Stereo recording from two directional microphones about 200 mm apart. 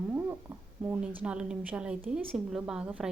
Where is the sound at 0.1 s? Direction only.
10° right (ahead or behind).